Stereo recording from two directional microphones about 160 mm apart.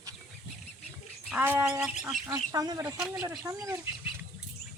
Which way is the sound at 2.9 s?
5° right (ahead or behind).